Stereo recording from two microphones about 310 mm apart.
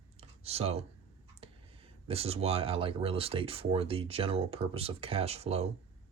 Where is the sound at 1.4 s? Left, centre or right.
Centre.